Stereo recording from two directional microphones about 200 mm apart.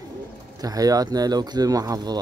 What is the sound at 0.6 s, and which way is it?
Speech, 20° right (ahead or behind).